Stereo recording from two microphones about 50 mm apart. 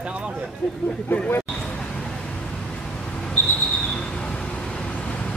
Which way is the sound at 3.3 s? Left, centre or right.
Left.